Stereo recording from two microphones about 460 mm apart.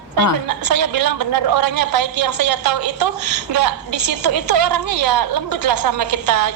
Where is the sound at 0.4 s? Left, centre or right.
Right.